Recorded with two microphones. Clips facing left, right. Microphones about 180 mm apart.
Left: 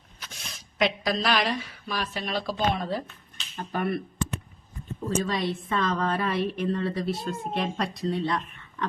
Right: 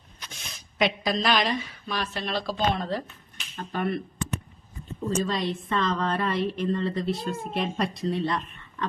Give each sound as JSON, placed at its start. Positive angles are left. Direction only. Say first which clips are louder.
{"t": 0.2, "sound": "speech", "louder": "even", "side_deg": 0}
{"t": 5.0, "sound": "a woman's voice", "louder": "even", "side_deg": 0}